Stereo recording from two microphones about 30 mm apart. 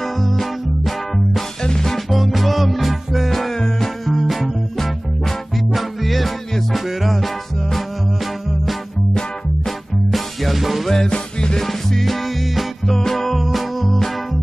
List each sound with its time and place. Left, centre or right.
0.0 s music: centre
1.6 s music: left
2.0 s music: centre
3.5 s music: centre
4.0 s music: centre
9.7 s music: centre
10.9 s music: left
11.6 s music: centre